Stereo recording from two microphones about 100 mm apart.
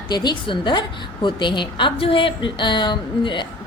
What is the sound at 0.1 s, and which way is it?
A woman's voice, 50° left (ahead or behind).